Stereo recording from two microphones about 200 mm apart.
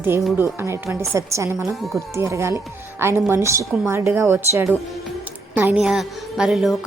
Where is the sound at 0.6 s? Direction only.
15° right (ahead or behind).